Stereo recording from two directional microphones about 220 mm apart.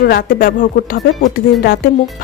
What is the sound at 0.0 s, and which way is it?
Speech, 40° left (ahead or behind).